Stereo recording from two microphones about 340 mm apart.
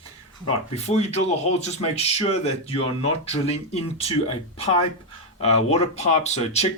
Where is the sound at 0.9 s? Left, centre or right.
Centre.